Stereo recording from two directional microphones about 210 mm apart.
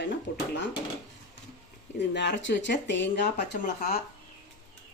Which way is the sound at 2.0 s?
55° left (ahead or behind).